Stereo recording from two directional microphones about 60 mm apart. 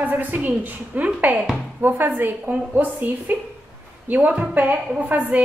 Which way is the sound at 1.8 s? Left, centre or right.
Right.